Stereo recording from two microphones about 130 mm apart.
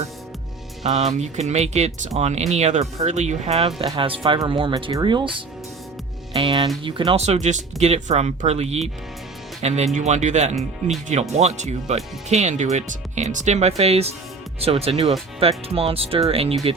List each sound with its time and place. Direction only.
0.9 s speech: 60° right (ahead or behind)
3.8 s speech: 40° right (ahead or behind)
6.3 s speech: 40° right (ahead or behind)
7.3 s speech: 65° right (ahead or behind)